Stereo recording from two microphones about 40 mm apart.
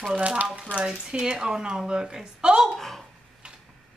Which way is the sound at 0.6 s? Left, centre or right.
Right.